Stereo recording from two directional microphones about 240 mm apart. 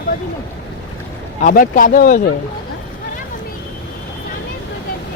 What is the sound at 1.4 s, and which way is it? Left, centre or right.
Speech, left.